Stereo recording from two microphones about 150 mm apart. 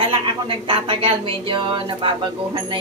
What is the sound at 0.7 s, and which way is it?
Speech, 35° right (ahead or behind).